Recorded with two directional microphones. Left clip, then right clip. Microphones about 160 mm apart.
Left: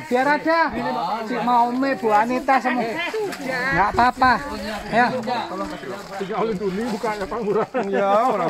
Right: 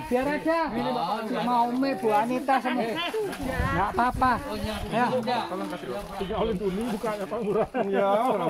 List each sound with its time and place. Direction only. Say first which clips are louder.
0.1 s speech: left 7 dB; 20° left (ahead or behind)
3.5 s speech: left 8 dB; 20° left (ahead or behind)
8.0 s speech: left 6 dB; 20° left (ahead or behind)